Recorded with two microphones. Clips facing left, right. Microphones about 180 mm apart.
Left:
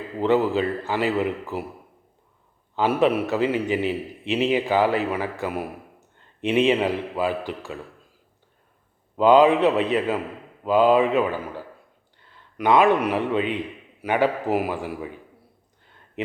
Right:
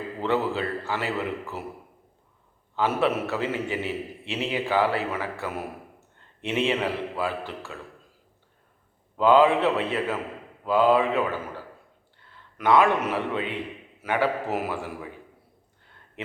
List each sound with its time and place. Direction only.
0.2 s a man's voice: 15° left (ahead or behind)
2.7 s a man's voice: 15° left (ahead or behind)
9.1 s a man's voice: 15° left (ahead or behind)
12.5 s a man's voice: 15° left (ahead or behind)